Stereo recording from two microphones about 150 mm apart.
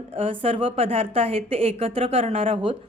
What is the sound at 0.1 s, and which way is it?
A woman's voice, 35° right (ahead or behind).